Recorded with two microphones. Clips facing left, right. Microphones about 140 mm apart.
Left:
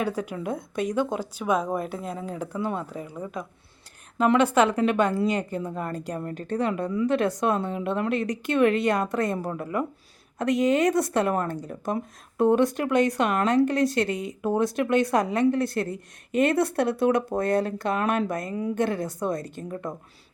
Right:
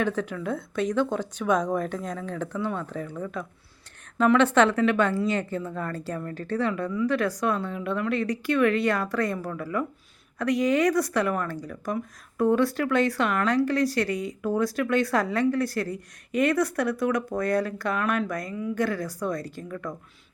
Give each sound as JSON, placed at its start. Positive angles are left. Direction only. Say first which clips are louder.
{"t": 0.0, "sound": "a woman's voice", "louder": "right 1 dB", "side_deg": 10}